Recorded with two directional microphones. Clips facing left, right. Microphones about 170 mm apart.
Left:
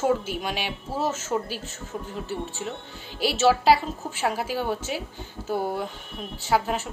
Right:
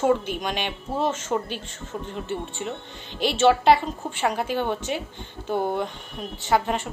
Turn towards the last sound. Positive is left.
turn(degrees=5)  # may be behind; listen again after turning